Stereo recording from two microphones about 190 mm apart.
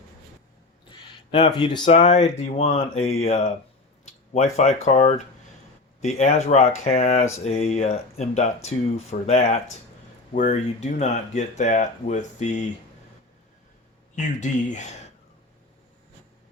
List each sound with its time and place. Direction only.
0.9 s speech: 25° left (ahead or behind)
14.2 s speech: 40° left (ahead or behind)